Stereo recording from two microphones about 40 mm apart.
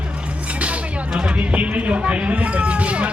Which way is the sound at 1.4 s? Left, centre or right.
Right.